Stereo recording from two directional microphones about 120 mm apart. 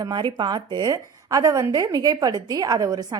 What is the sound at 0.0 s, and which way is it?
A woman's voice, 40° right (ahead or behind).